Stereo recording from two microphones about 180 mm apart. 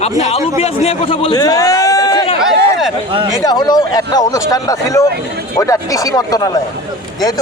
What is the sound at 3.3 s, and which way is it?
Speech, 20° left (ahead or behind).